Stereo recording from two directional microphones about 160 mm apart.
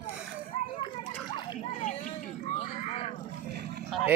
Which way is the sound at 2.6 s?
40° left (ahead or behind).